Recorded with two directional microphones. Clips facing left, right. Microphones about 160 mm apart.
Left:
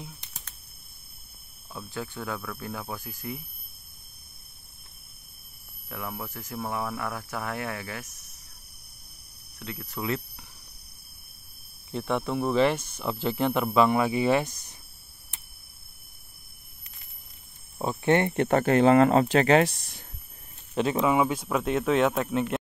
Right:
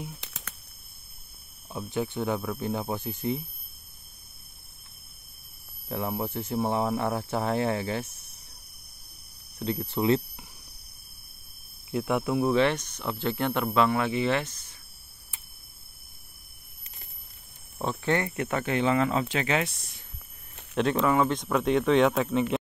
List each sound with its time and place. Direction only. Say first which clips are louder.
0.2 s a sound: right 6 dB; 90° right
1.7 s speech: right 6 dB; 20° right (ahead or behind)
5.9 s speech: right 6 dB; 30° right (ahead or behind)
9.6 s speech: right 7 dB; 30° right (ahead or behind)
11.9 s speech: right 2 dB; 5° right (ahead or behind); by 14.8 s 15° left (ahead or behind)
17.8 s speech: left 4 dB; 20° left (ahead or behind); by 20.0 s 40° left (ahead or behind)
20.7 s speech: even; 5° left (ahead or behind)